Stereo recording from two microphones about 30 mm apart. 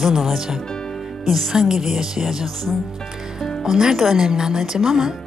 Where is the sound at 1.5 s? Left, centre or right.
Centre.